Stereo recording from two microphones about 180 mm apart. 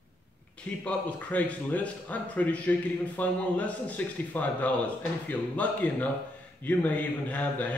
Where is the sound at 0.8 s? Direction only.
10° left (ahead or behind).